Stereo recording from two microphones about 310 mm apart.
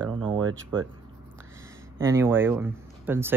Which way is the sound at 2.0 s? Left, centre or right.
Centre.